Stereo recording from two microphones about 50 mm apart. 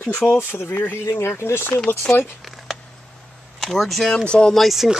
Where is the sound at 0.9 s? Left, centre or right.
Left.